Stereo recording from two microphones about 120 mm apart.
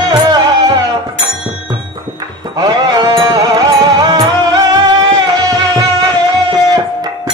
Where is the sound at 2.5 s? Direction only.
35° right (ahead or behind).